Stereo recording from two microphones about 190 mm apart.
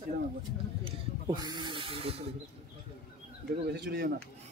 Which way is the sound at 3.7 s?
60° right (ahead or behind).